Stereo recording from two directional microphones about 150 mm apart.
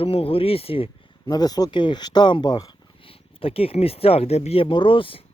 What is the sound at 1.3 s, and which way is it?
Speech, 25° left (ahead or behind).